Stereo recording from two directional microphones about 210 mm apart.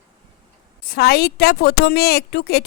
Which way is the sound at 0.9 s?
45° left (ahead or behind).